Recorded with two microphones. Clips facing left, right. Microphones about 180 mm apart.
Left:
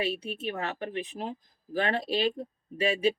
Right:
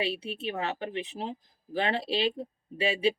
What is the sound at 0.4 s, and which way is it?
Speech, 25° right (ahead or behind).